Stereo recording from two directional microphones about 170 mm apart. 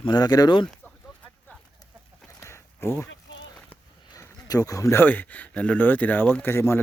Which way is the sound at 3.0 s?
90° left.